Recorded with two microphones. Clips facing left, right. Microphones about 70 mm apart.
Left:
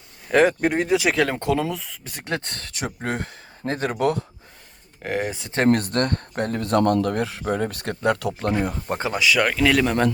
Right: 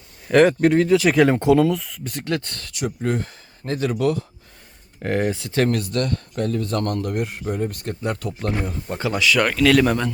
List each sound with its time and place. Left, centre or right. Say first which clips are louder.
0.3 s speech: right 3 dB; centre
0.8 s speech: right 3 dB; centre
1.1 s speech: right 6 dB; centre
1.7 s speech: right 6 dB; centre
2.2 s speech: right 2 dB; left
5.0 s speech: right 4 dB; centre
5.3 s speech: right 3 dB; left
5.7 s speech: left 1 dB; left
7.2 s speech: left 1 dB; left
9.0 s speech: right 5 dB; left
9.2 s speech: right 1 dB; centre
9.7 s speech: right 3 dB; centre